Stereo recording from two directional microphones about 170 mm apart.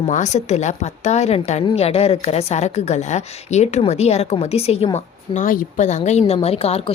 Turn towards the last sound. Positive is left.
turn(degrees=35)  # may be behind; listen again after turning